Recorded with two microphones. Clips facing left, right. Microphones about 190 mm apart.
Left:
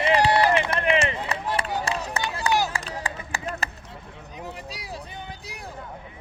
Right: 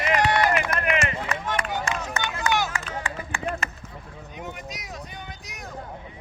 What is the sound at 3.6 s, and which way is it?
Chop, 35° left (ahead or behind).